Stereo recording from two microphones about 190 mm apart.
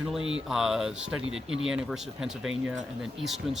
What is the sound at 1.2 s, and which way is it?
Speech, 90° right.